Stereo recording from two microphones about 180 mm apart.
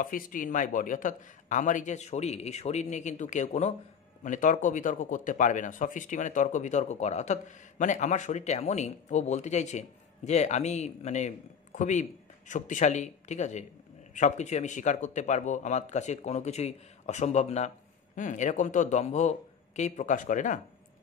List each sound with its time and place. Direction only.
0.0 s speech: 50° left (ahead or behind)